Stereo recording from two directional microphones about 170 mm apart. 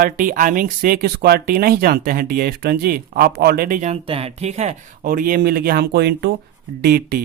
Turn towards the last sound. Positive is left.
turn(degrees=-70)  # may be behind; listen again after turning